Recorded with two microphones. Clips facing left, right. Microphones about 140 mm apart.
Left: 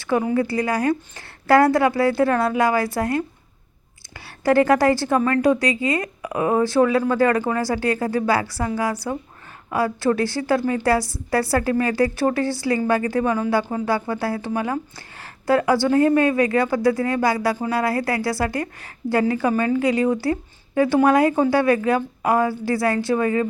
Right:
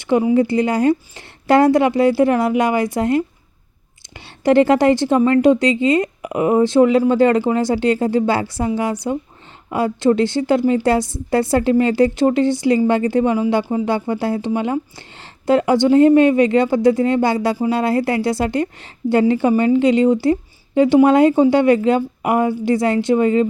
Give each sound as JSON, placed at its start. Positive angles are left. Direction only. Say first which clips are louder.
{"t": 0.0, "sound": "a woman's voice", "louder": "right 5 dB", "side_deg": -20}